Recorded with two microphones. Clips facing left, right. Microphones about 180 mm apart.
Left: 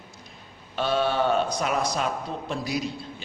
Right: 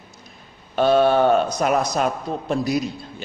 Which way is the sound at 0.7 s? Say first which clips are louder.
Right 8 dB; 50° right (ahead or behind).